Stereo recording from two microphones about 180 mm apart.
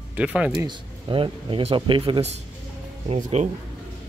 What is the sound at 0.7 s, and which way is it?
Speech, 30° right (ahead or behind).